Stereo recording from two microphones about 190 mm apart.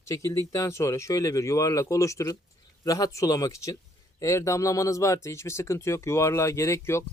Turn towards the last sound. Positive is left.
turn(degrees=15)  # may be behind; listen again after turning